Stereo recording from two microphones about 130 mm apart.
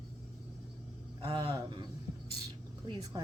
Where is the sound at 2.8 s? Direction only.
30° right (ahead or behind).